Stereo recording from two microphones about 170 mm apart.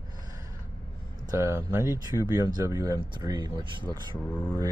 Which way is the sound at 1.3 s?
15° right (ahead or behind).